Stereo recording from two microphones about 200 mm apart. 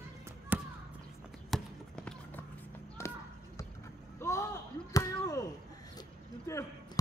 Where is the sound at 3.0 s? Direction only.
15° left (ahead or behind).